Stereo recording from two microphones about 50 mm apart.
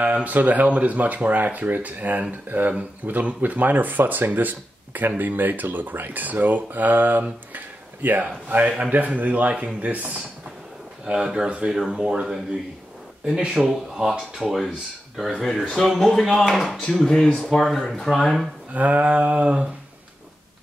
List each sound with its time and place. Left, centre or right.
0.0 s speech: right
11.1 s speech: centre
11.4 s a sound: right
11.9 s speech: centre
13.6 s speech: centre
18.7 s a sound: right